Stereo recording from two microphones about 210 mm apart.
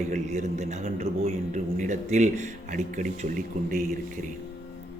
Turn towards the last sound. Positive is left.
turn(degrees=-40)  # may be behind; listen again after turning